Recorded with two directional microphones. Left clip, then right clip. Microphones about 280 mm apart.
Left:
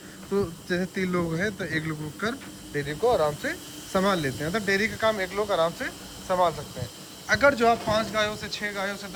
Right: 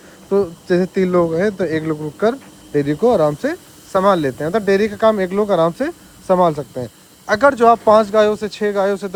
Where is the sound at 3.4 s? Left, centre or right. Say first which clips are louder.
Right 9 dB; centre.